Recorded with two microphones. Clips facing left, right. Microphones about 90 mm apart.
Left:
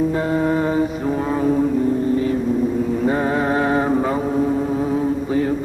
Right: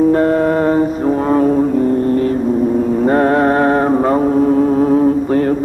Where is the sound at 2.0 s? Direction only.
65° right (ahead or behind).